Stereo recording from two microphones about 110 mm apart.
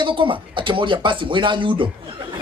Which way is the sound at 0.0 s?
50° right (ahead or behind).